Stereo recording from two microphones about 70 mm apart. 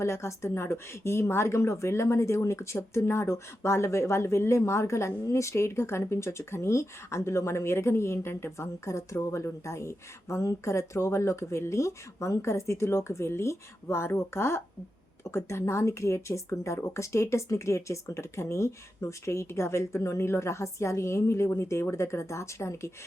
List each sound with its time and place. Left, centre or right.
0.0 s a woman's voice: left